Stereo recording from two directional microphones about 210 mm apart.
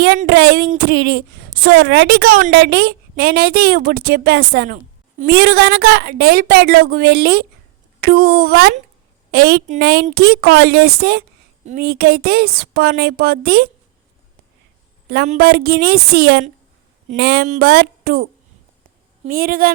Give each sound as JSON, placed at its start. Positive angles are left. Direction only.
{"t": 0.3, "sound": "a woman's voice", "side_deg": -50}
{"t": 15.4, "sound": "a woman's voice", "side_deg": -45}
{"t": 17.4, "sound": "speech", "side_deg": -35}
{"t": 17.7, "sound": "a woman's voice", "side_deg": -45}